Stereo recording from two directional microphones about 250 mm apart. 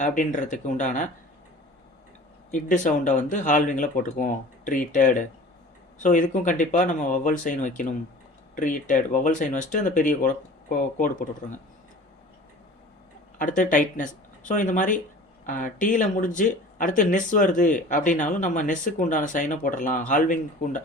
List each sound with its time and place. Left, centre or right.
0.0 s speech: left
2.5 s speech: left
13.4 s speech: left